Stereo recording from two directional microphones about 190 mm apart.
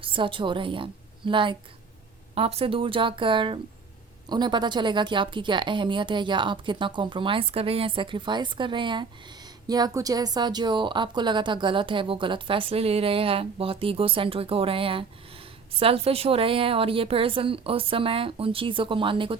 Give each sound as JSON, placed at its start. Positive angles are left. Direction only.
{"t": 0.0, "sound": "a woman's voice", "side_deg": -25}